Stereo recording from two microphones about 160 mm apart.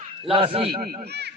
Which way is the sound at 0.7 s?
75° right (ahead or behind).